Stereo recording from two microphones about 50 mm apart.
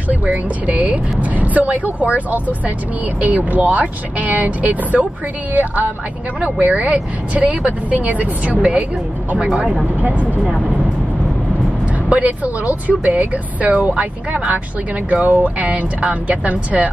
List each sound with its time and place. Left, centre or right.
0.1 s speech: right
10.0 s speech: right
12.1 s speech: right